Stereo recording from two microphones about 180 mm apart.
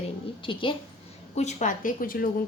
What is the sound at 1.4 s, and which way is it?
Speech, 40° left (ahead or behind).